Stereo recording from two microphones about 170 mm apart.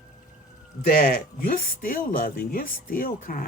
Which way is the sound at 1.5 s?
55° left (ahead or behind).